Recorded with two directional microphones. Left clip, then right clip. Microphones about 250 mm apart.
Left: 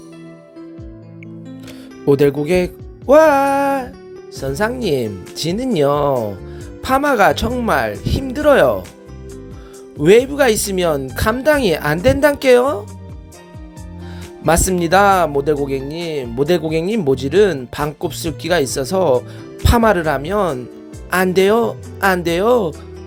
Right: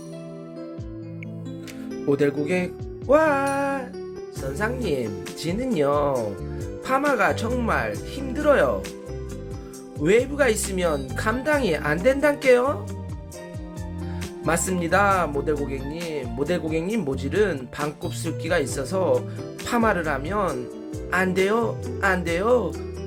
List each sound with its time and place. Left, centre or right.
2.0 s speech: left
10.0 s speech: left
14.4 s speech: left